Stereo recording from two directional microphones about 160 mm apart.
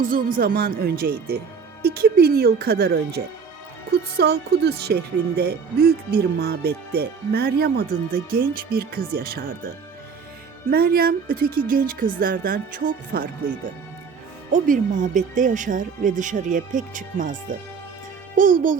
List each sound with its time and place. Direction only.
0.0 s speech: 60° right (ahead or behind)
1.8 s speech: 80° right
4.2 s speech: 90° right; by 9.6 s 65° right (ahead or behind)
10.7 s speech: 75° right (ahead or behind)
14.5 s speech: 55° right (ahead or behind)
18.3 s speech: 55° right (ahead or behind)